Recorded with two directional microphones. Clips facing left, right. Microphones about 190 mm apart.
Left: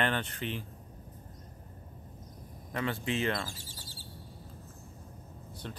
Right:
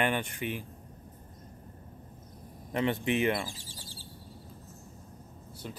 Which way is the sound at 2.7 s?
20° right (ahead or behind).